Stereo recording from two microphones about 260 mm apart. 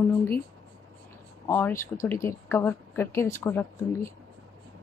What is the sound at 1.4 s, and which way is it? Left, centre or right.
Speech, centre.